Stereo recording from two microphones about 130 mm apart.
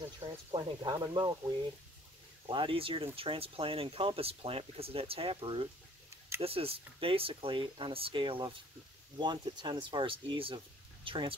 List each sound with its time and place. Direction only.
0.2 s speech: 50° right (ahead or behind)
0.6 s speech: 35° right (ahead or behind)
2.4 s speech: 40° right (ahead or behind)